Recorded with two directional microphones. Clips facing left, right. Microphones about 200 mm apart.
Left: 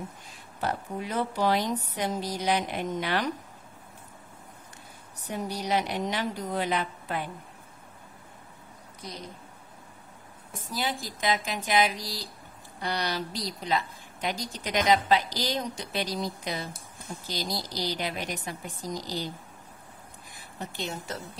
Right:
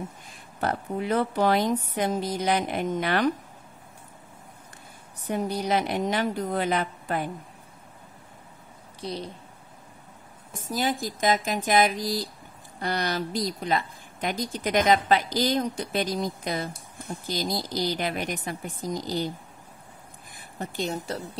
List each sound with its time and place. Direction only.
0.6 s speech: 60° right (ahead or behind)
5.3 s speech: 50° right (ahead or behind)
9.0 s a woman's voice: 30° right (ahead or behind)
10.5 s speech: 45° right (ahead or behind)
20.5 s a woman's voice: 45° right (ahead or behind)